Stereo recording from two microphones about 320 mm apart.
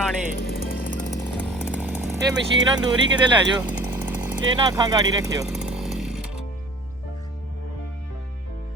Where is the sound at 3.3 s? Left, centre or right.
Centre.